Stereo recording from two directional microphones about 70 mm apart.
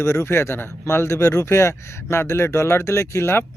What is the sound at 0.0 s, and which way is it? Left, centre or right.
Speech, left.